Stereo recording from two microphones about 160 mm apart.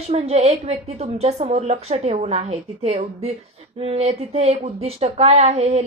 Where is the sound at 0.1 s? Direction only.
45° right (ahead or behind).